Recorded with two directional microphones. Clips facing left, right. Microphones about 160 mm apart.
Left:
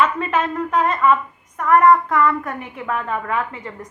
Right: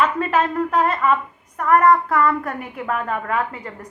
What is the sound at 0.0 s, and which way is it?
A woman's voice, 35° right (ahead or behind).